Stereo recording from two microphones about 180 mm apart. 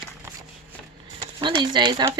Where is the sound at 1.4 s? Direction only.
25° right (ahead or behind).